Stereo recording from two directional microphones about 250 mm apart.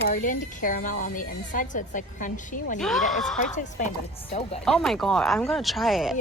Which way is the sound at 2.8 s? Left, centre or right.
Centre.